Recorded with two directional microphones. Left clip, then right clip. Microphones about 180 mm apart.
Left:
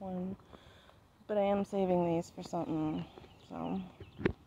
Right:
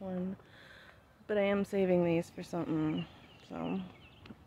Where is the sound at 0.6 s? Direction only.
20° right (ahead or behind).